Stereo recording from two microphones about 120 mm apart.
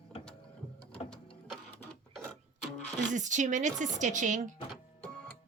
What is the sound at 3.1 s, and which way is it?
Speech, 90° right.